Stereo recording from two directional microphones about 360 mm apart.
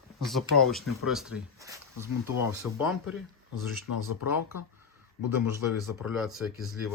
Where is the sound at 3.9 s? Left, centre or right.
Left.